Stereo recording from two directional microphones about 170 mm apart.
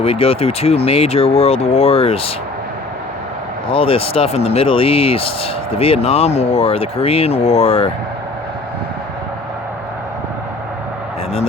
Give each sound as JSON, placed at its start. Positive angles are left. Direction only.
{"t": 0.0, "sound": "speech", "side_deg": 35}
{"t": 3.7, "sound": "speech", "side_deg": 35}